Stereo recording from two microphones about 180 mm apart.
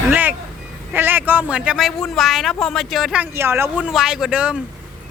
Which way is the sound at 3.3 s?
10° right (ahead or behind).